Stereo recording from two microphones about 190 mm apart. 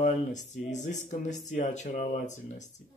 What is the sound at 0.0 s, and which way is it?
Speech, 40° left (ahead or behind).